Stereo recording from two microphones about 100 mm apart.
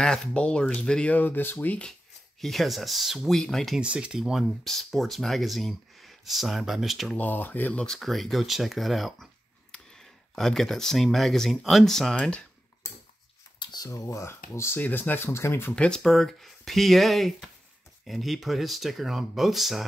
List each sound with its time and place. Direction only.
0.0 s speech: 10° left (ahead or behind)
2.4 s speech: centre (ahead or behind)
3.8 s speech: 10° right (ahead or behind)
7.2 s speech: 20° left (ahead or behind)
7.8 s speech: 5° left (ahead or behind)
13.6 s a sound: 50° left (ahead or behind)
13.8 s speech: 30° left (ahead or behind)
15.7 s speech: 10° left (ahead or behind)